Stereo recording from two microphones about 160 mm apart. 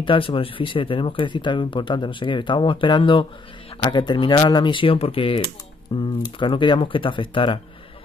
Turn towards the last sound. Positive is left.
turn(degrees=30)  # may be behind; listen again after turning